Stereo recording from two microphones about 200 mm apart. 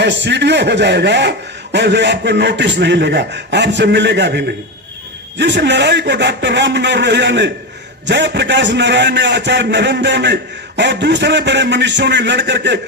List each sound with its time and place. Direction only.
0.0 s a man's voice: 60° right (ahead or behind)